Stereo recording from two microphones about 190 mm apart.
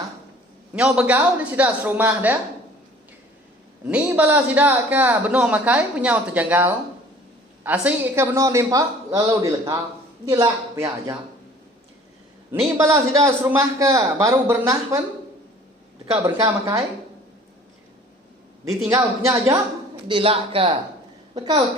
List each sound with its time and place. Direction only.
0.8 s a man's voice: 5° right (ahead or behind)
3.8 s a man's voice: 5° right (ahead or behind)
12.7 s a man's voice: 15° right (ahead or behind)
16.2 s a man's voice: 15° right (ahead or behind)
18.9 s a man's voice: 15° right (ahead or behind)
20.1 s a man's voice: 25° right (ahead or behind)